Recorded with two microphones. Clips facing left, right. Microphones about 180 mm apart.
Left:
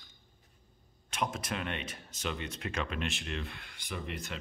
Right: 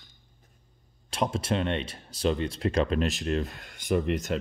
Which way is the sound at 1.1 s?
30° right (ahead or behind).